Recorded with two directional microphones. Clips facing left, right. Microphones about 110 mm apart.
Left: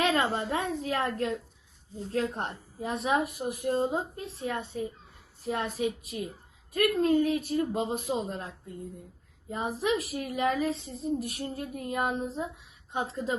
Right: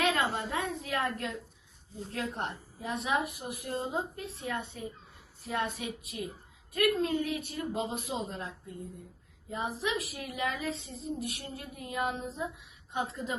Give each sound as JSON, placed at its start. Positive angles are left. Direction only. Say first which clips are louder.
{"t": 0.0, "sound": "a woman's voice", "louder": "left 3 dB", "side_deg": 35}
{"t": 12.9, "sound": "a woman's voice", "louder": "left 3 dB", "side_deg": 35}